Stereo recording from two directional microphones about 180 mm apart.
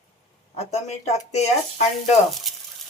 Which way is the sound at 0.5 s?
40° left (ahead or behind).